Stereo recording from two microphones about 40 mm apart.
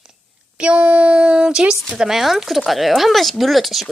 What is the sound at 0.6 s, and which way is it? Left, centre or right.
Speech, right.